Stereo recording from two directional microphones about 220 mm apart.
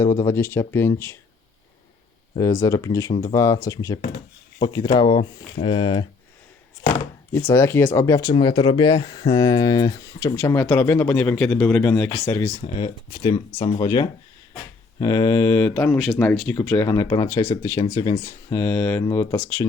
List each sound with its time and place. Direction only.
0.0 s speech: 15° left (ahead or behind)
2.4 s speech: 15° left (ahead or behind)
7.5 s speech: 10° left (ahead or behind)
12.5 s speech: 25° left (ahead or behind)
18.5 s speech: 10° left (ahead or behind)